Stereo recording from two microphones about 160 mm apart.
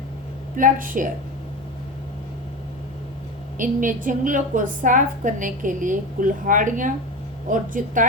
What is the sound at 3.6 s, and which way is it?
A woman's voice, 55° right (ahead or behind).